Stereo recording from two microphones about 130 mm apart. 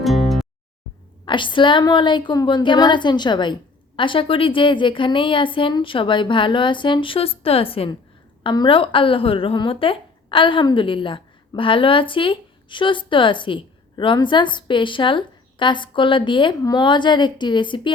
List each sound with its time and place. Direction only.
0.0 s music: centre (ahead or behind)
1.2 s a woman's voice: 40° left (ahead or behind)